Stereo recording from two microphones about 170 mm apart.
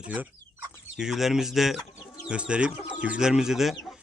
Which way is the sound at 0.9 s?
5° right (ahead or behind).